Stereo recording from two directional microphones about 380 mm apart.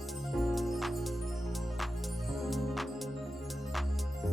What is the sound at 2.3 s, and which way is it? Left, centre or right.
Music, centre.